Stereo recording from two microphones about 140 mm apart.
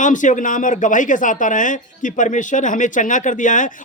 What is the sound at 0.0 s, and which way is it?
Speech, 65° left (ahead or behind).